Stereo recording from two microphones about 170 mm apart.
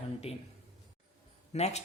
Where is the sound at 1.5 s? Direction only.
40° left (ahead or behind).